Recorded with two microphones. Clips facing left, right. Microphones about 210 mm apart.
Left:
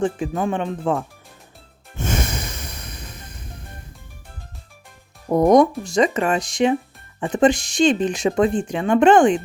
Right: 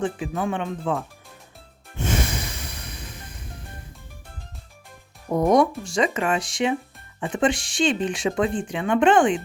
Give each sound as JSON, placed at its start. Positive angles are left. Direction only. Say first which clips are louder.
{"t": 0.0, "sound": "speech", "louder": "left 4 dB", "side_deg": 40}
{"t": 2.0, "sound": "snort", "louder": "left 1 dB", "side_deg": 45}
{"t": 5.3, "sound": "speech", "louder": "left 5 dB", "side_deg": 40}